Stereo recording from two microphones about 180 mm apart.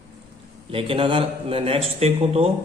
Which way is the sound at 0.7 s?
30° right (ahead or behind).